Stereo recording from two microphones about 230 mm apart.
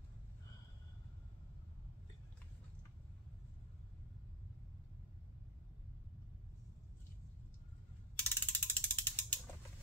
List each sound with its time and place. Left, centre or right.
8.2 s ratchet: centre